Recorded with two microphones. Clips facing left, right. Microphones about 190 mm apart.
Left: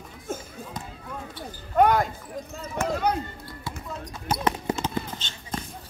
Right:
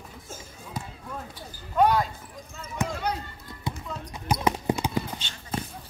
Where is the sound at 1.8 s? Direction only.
50° left (ahead or behind).